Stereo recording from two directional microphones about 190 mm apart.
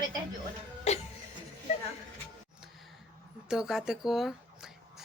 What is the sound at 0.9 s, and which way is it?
Music, 35° left (ahead or behind).